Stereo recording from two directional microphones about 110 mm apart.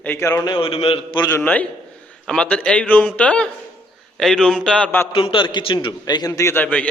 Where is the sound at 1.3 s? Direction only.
15° left (ahead or behind).